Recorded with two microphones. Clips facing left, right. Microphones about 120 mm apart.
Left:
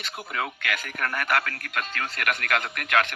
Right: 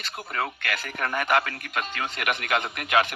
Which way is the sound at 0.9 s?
10° right (ahead or behind).